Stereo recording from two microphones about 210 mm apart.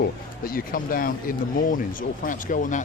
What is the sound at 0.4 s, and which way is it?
Speech, 45° left (ahead or behind).